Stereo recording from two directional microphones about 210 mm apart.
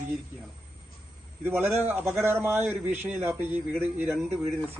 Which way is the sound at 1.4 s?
10° right (ahead or behind).